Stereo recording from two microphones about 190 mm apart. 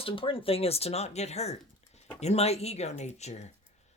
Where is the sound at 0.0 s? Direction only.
30° left (ahead or behind).